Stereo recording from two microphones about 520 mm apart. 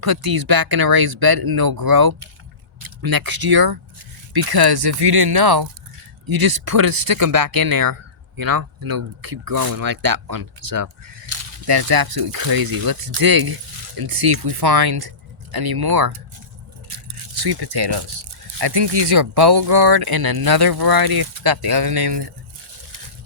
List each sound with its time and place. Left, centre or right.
0.0 s speech: right
17.3 s speech: right